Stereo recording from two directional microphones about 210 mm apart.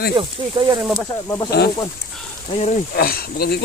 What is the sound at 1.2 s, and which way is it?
Speech, 15° left (ahead or behind).